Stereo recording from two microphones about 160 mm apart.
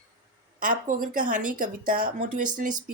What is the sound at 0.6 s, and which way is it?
A woman's voice, 55° right (ahead or behind).